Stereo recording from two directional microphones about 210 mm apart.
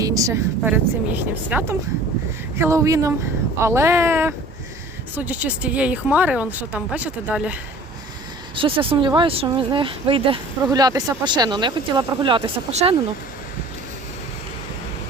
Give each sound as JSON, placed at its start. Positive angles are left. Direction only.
{"t": 0.0, "sound": "a woman's voice", "side_deg": -15}
{"t": 8.5, "sound": "speech", "side_deg": -25}